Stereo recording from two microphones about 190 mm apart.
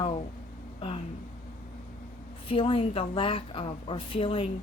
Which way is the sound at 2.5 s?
30° left (ahead or behind).